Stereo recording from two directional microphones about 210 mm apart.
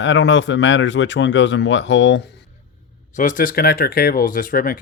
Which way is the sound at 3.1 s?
40° left (ahead or behind).